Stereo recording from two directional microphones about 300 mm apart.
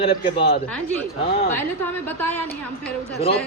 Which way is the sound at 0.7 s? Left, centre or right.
Centre.